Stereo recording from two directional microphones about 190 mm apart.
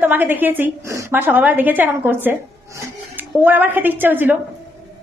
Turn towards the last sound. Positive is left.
turn(degrees=-10)  # may be behind; listen again after turning